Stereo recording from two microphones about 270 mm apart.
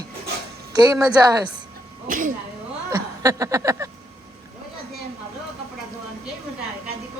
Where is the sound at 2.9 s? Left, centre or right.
Centre.